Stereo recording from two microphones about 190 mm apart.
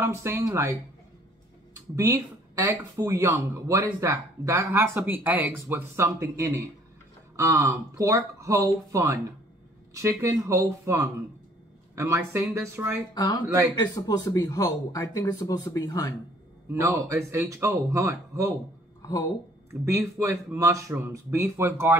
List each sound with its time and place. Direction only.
0.0 s speech: 15° right (ahead or behind)
2.0 s speech: 15° right (ahead or behind)
13.1 s speech: 20° left (ahead or behind)
16.7 s speech: 15° right (ahead or behind)
19.7 s speech: 15° right (ahead or behind)